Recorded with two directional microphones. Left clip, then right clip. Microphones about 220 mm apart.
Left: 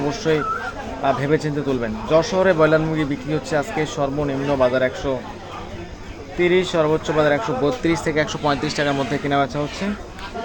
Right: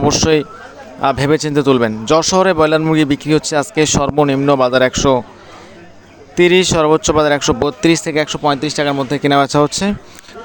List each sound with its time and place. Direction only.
0.1 s speech: 50° right (ahead or behind)
6.4 s speech: 45° right (ahead or behind)